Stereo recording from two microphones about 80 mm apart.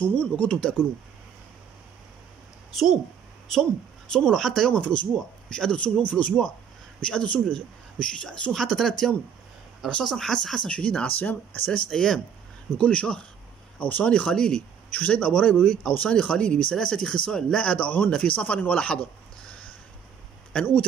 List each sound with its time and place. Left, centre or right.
0.0 s speech: centre
4.1 s speech: centre
11.9 s speech: centre